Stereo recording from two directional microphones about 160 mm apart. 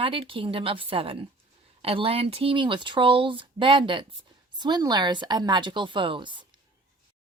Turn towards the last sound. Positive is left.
turn(degrees=-30)  # may be behind; listen again after turning